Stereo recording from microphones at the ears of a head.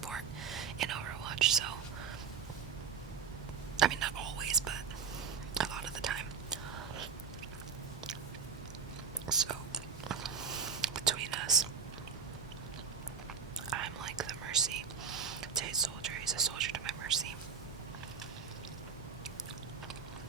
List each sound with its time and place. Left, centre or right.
0.1 s whispering: right
3.8 s whispering: right
9.2 s whispering: right
13.7 s whispering: right